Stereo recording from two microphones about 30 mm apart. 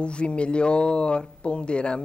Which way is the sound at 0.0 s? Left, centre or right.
Left.